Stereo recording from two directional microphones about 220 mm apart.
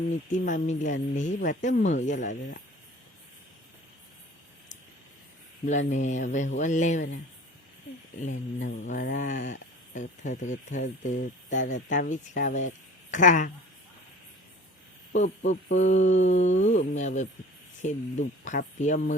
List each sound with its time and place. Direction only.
0.1 s speech: 35° left (ahead or behind)
5.9 s speech: 35° left (ahead or behind)
8.3 s speech: 65° left (ahead or behind)
8.9 s speech: 35° left (ahead or behind)
15.4 s speech: 35° left (ahead or behind)